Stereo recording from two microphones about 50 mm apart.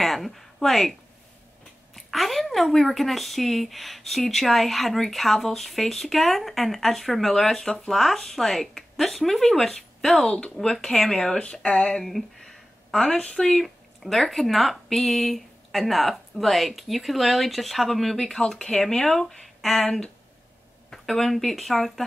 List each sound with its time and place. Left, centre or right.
0.0 s speech: centre
2.0 s speech: centre
7.9 s speech: centre
10.3 s speech: centre
13.6 s speech: centre